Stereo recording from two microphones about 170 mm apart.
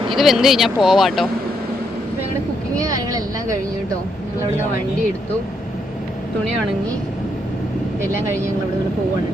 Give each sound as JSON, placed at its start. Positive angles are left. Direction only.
{"t": 0.1, "sound": "speech", "side_deg": 0}
{"t": 3.1, "sound": "speech", "side_deg": -20}